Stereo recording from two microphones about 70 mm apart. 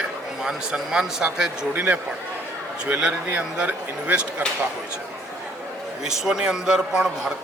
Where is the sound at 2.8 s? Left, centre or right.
Centre.